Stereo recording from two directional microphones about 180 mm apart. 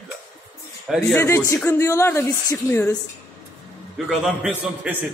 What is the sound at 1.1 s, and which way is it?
Speech, 15° left (ahead or behind).